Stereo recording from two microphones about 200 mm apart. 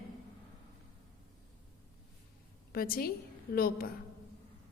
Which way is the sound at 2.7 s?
45° left (ahead or behind).